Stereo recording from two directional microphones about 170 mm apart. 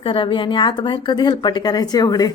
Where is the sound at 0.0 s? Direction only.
30° left (ahead or behind).